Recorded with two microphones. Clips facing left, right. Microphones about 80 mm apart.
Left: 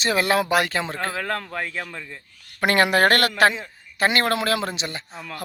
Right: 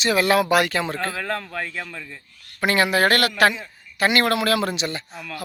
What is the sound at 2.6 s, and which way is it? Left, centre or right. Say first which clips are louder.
A man's voice: left 1 dB; left.